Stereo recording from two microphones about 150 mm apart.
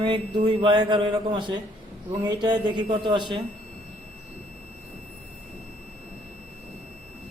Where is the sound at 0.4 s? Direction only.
30° right (ahead or behind).